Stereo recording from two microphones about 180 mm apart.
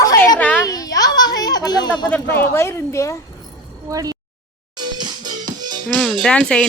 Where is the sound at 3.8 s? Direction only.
20° right (ahead or behind).